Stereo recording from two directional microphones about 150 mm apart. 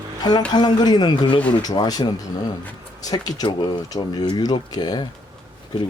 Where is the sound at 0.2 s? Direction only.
25° left (ahead or behind).